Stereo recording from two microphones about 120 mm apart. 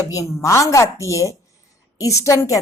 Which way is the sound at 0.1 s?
25° left (ahead or behind).